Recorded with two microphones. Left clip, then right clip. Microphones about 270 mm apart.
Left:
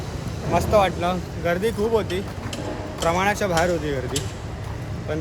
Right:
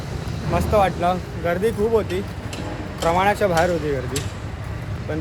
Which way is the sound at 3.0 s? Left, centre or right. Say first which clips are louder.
Right 3 dB; centre.